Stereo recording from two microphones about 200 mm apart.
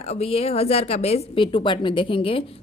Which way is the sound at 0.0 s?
30° left (ahead or behind).